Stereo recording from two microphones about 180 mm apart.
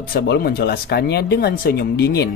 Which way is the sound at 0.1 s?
55° left (ahead or behind).